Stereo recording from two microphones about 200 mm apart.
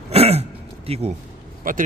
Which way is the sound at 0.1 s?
30° right (ahead or behind).